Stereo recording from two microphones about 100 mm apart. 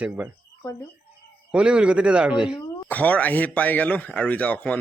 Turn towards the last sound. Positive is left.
turn(degrees=15)  # may be behind; listen again after turning